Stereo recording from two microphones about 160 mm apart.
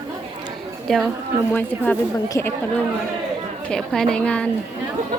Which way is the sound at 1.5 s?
15° left (ahead or behind).